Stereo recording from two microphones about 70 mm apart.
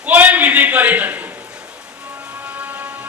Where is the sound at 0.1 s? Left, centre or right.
Right.